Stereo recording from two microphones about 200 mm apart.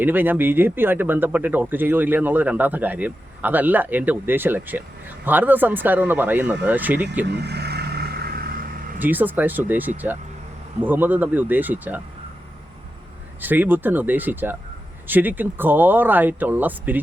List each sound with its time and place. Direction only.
0.0 s speech: 10° right (ahead or behind)
7.4 s vehicle: 55° right (ahead or behind)
9.0 s speech: 10° right (ahead or behind)
13.4 s speech: 10° right (ahead or behind)